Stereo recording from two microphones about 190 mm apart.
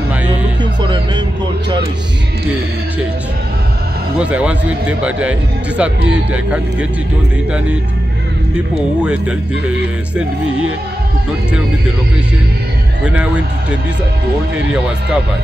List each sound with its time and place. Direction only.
0.8 s music: 25° right (ahead or behind)
4.2 s a man's voice: 5° right (ahead or behind)
9.0 s a man's voice: 5° right (ahead or behind)
13.0 s a man's voice: 5° right (ahead or behind)